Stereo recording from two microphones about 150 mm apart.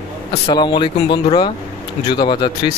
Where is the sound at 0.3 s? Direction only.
35° left (ahead or behind).